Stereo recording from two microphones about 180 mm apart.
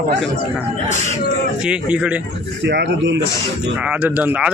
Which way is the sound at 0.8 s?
40° left (ahead or behind).